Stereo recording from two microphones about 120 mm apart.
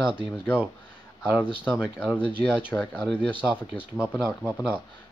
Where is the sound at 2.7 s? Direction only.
15° left (ahead or behind).